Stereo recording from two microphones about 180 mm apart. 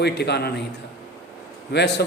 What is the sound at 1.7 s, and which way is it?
Speech, 65° left (ahead or behind).